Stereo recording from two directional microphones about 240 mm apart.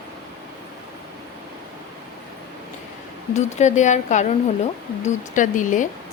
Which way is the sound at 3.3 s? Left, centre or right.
Left.